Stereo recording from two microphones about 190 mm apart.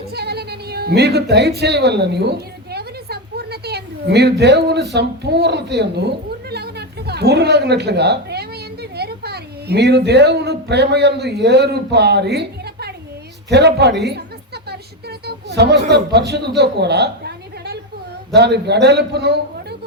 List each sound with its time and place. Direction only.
0.1 s a woman's voice: 60° right (ahead or behind)
13.5 s a sound: 60° right (ahead or behind)
15.9 s a woman's voice: 60° right (ahead or behind)